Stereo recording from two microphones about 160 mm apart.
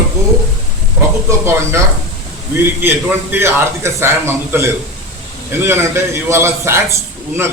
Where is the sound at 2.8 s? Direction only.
15° right (ahead or behind).